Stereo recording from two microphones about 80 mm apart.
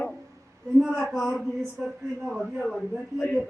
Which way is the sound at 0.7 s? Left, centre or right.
Centre.